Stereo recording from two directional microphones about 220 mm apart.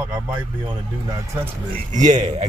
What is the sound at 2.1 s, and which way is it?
Speech, 30° right (ahead or behind).